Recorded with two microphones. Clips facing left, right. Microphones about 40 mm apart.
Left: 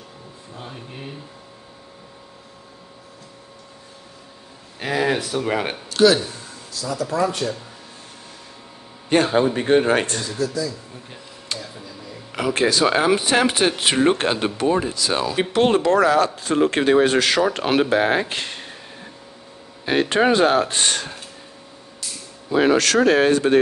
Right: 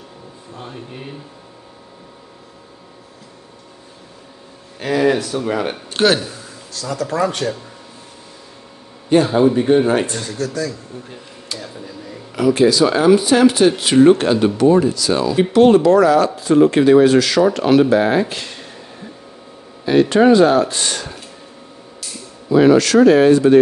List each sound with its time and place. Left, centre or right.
0.6 s speech: centre
4.7 s speech: centre
5.9 s a sound: right
6.7 s speech: right
9.1 s a man's voice: left
9.6 s speech: left
9.9 s speech: left
10.4 s speech: right
11.5 s speech: left
19.8 s speech: left
22.5 s speech: left
23.0 s speech: left